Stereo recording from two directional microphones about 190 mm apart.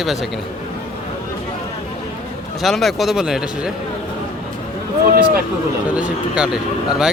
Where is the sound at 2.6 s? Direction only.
Centre (ahead or behind).